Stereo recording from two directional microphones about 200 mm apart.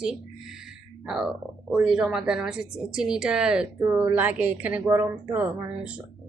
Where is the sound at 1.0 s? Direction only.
5° right (ahead or behind).